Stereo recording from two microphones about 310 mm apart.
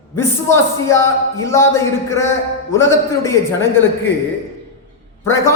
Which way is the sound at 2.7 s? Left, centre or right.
Centre.